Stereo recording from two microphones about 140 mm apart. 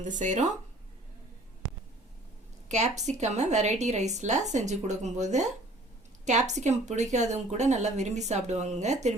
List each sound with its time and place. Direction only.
0.1 s speech: 60° right (ahead or behind)
2.6 s speech: 55° right (ahead or behind)